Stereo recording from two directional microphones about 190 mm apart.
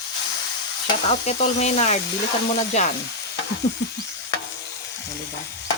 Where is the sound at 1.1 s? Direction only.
35° left (ahead or behind).